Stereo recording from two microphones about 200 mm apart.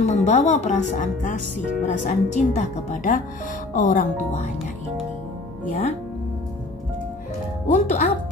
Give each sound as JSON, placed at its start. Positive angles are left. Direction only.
{"t": 0.0, "sound": "speech", "side_deg": 35}
{"t": 7.6, "sound": "speech", "side_deg": 35}